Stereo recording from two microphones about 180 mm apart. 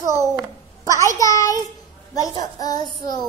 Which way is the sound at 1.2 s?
20° left (ahead or behind).